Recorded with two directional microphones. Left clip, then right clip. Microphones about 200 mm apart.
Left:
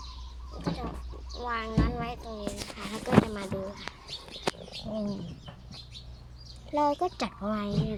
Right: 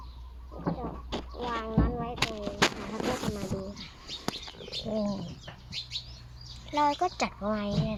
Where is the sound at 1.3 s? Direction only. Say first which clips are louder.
Left 1 dB; 35° left (ahead or behind).